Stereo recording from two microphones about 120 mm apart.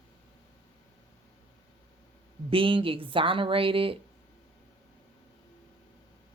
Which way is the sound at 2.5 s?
45° right (ahead or behind).